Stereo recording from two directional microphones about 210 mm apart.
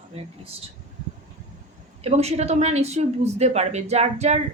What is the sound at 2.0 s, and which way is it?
A woman's voice, 30° right (ahead or behind).